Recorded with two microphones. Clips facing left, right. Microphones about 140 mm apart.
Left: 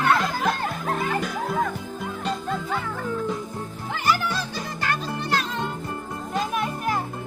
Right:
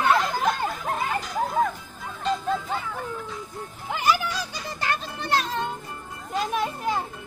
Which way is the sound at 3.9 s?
15° right (ahead or behind).